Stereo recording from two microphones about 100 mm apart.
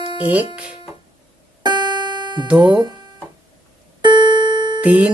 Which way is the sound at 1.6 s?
45° right (ahead or behind).